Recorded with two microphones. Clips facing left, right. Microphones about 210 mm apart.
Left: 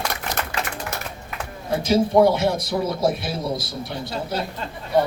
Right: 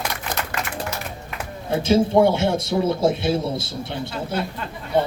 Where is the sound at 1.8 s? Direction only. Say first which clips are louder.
Even; 25° right (ahead or behind).